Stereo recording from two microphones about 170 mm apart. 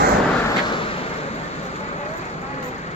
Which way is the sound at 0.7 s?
30° left (ahead or behind).